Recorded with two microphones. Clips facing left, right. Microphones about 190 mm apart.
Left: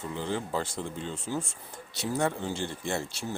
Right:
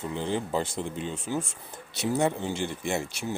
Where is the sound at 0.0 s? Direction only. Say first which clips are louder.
Right 3 dB; 20° right (ahead or behind).